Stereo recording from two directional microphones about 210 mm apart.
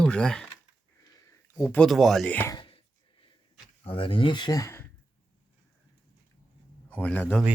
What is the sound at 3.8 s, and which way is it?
Speech, 25° left (ahead or behind).